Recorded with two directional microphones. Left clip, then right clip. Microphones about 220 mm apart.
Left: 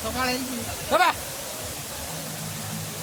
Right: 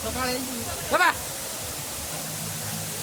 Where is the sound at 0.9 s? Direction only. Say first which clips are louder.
Left 1 dB; 20° left (ahead or behind).